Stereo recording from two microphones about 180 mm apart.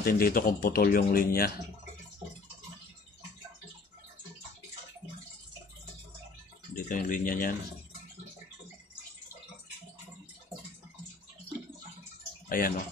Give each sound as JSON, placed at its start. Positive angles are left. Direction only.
{"t": 0.0, "sound": "speech", "side_deg": 55}
{"t": 6.7, "sound": "speech", "side_deg": 50}
{"t": 12.4, "sound": "speech", "side_deg": 50}